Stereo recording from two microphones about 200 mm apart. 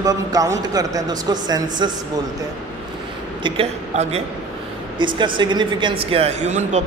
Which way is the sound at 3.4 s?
30° right (ahead or behind).